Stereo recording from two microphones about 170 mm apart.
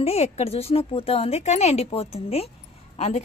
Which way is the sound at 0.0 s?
35° left (ahead or behind).